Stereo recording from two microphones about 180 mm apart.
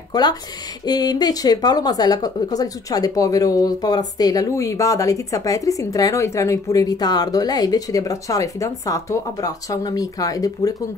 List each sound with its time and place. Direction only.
0.1 s a woman's voice: 20° left (ahead or behind)